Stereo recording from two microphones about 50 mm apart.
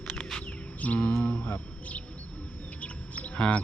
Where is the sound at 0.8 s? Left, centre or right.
Left.